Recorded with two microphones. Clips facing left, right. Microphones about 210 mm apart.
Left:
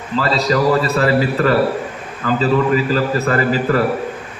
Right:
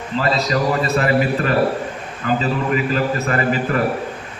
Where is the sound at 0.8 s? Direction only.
35° left (ahead or behind).